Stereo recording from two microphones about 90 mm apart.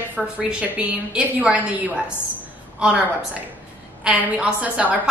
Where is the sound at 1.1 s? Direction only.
15° right (ahead or behind).